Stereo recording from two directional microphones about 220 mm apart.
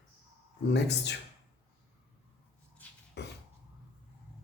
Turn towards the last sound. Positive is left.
turn(degrees=50)  # may be behind; listen again after turning